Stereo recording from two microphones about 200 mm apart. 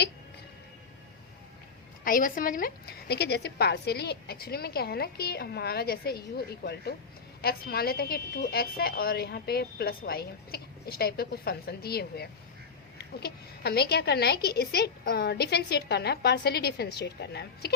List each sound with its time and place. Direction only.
2.0 s a woman's voice: 45° left (ahead or behind)